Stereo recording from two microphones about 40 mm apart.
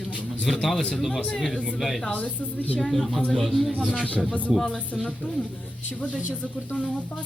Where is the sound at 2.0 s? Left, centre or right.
Left.